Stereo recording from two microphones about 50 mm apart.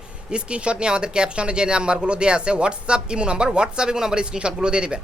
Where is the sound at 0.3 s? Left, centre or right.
Centre.